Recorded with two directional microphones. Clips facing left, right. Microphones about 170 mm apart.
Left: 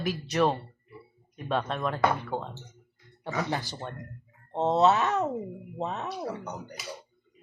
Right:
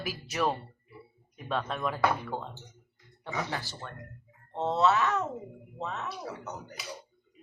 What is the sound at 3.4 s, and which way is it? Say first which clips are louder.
Speech: left 5 dB; 20° left (ahead or behind).